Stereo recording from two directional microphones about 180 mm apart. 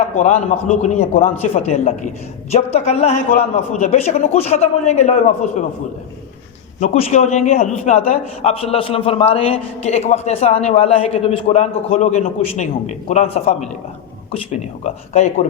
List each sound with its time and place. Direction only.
0.2 s a man's voice: 40° left (ahead or behind)
6.7 s a man's voice: 40° left (ahead or behind)
14.8 s a man's voice: 40° left (ahead or behind)